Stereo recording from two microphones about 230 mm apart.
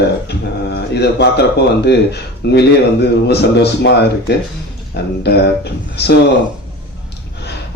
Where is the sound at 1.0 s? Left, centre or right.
Left.